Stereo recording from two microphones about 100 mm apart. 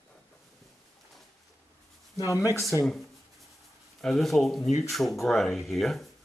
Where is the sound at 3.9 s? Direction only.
Centre (ahead or behind).